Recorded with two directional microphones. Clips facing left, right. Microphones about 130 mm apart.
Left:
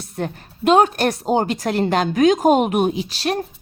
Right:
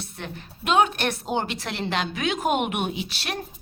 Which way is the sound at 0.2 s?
40° left (ahead or behind).